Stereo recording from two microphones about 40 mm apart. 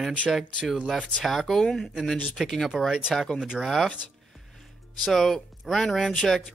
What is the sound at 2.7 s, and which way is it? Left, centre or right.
Speech, centre.